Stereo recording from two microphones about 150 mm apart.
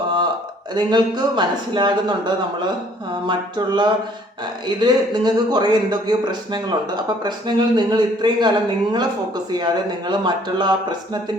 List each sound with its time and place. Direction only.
0.7 s speech: 30° right (ahead or behind)
3.2 s a sound: 30° right (ahead or behind)
4.8 s speech: 30° right (ahead or behind)